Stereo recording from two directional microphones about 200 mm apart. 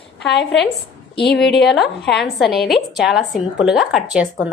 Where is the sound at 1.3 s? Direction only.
Centre (ahead or behind).